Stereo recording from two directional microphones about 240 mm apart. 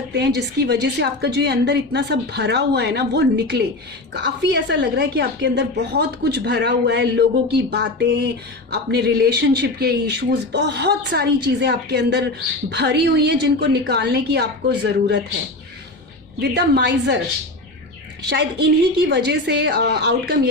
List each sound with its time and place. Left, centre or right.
0.1 s a woman's voice: right
16.4 s a woman's voice: right
18.3 s a woman's voice: right